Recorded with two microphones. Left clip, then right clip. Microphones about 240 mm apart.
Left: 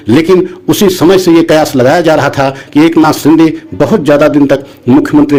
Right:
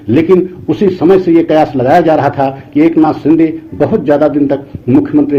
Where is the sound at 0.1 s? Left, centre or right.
Left.